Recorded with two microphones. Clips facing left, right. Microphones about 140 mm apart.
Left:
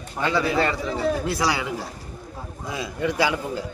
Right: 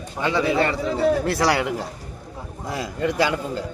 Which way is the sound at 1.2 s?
70° right (ahead or behind).